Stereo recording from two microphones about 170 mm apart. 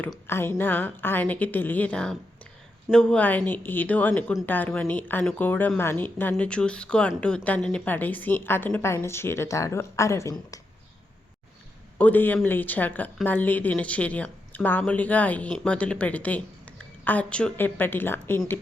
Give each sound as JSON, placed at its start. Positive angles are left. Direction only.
{"t": 0.1, "sound": "a woman's voice", "side_deg": 15}
{"t": 11.9, "sound": "a woman's voice", "side_deg": 10}